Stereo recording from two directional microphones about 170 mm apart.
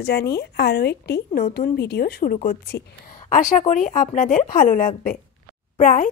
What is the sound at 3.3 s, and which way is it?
Speech, 45° left (ahead or behind).